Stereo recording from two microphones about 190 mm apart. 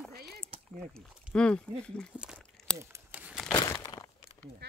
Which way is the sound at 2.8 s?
10° right (ahead or behind).